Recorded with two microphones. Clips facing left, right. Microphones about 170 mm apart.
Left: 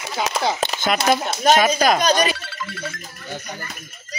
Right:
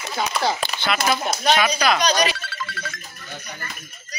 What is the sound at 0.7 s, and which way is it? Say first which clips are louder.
Speech: left 3 dB; 45° left (ahead or behind).